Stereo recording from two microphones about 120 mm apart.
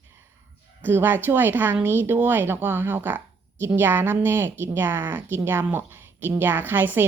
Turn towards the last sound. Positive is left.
turn(degrees=-15)  # may be behind; listen again after turning